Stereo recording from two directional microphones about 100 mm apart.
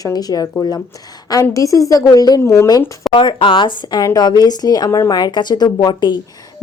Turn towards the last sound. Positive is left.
turn(degrees=50)  # may be behind; listen again after turning